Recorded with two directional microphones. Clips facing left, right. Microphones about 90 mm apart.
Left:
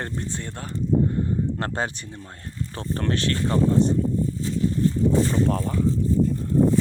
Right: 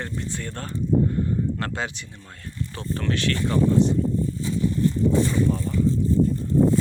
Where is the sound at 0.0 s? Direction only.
35° left (ahead or behind).